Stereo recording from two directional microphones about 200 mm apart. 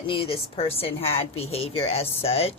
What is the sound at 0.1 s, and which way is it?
A woman's voice, 25° left (ahead or behind).